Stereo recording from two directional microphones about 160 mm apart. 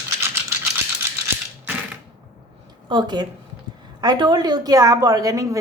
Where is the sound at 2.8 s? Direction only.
25° right (ahead or behind).